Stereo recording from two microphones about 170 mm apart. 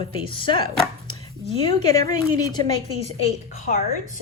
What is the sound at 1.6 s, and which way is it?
A woman's voice, 20° left (ahead or behind).